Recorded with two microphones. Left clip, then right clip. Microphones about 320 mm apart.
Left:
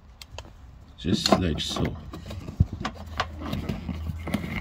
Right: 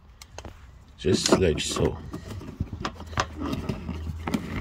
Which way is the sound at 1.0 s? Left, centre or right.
Centre.